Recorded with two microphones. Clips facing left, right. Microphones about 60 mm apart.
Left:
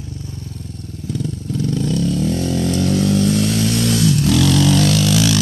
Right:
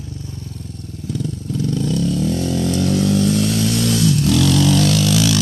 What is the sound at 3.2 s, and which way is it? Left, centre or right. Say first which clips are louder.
Motorcycle: even; centre.